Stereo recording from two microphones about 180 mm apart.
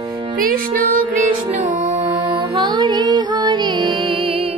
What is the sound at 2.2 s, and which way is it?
Music, 25° right (ahead or behind).